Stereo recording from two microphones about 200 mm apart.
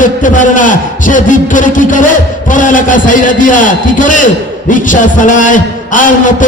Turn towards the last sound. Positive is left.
turn(degrees=40)  # may be behind; listen again after turning